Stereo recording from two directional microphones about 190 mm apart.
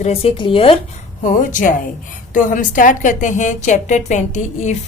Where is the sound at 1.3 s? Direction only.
45° left (ahead or behind).